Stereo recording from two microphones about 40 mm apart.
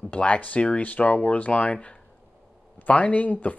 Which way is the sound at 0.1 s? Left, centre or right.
Left.